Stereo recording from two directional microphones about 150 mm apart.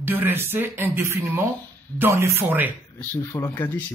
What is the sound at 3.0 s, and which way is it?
Speech, 15° left (ahead or behind).